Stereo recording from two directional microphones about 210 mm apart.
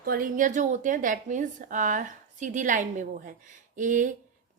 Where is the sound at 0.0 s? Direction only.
45° right (ahead or behind).